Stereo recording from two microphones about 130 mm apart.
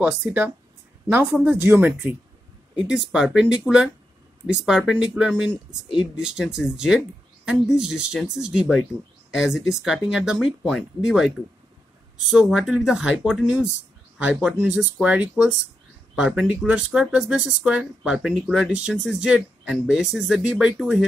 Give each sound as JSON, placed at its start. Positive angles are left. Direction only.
{"t": 0.0, "sound": "speech", "side_deg": -15}
{"t": 2.9, "sound": "speech", "side_deg": -5}